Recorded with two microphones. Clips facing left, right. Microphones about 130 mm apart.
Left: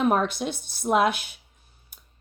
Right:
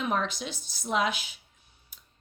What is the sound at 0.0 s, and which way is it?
A woman's voice, 50° left (ahead or behind).